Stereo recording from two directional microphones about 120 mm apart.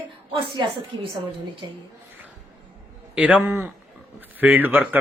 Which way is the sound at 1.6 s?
35° right (ahead or behind).